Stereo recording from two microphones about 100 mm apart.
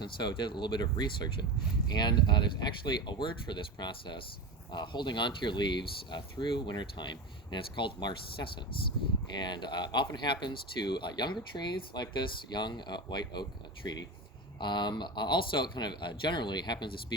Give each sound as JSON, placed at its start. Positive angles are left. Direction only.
{"t": 0.0, "sound": "speech", "side_deg": 50}